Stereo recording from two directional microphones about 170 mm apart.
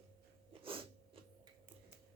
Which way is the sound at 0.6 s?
30° right (ahead or behind).